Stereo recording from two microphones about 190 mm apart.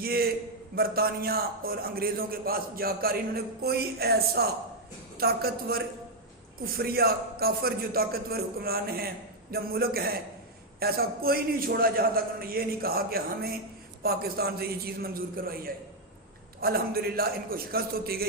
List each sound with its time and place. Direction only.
0.0 s a man's voice: 50° right (ahead or behind)